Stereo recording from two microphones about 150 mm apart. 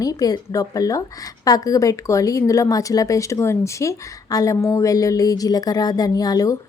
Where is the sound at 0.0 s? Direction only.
25° left (ahead or behind).